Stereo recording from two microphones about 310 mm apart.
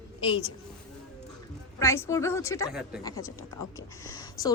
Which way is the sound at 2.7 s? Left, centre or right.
Centre.